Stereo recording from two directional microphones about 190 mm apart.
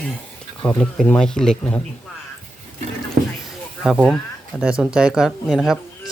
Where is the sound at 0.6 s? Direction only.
5° left (ahead or behind).